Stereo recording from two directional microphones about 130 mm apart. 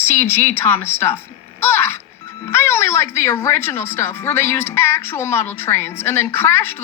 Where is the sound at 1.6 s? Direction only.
20° left (ahead or behind).